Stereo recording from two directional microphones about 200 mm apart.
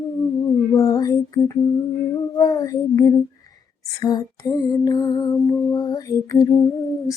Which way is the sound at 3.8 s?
20° left (ahead or behind).